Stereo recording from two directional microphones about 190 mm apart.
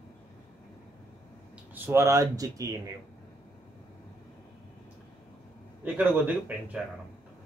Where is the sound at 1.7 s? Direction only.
10° right (ahead or behind).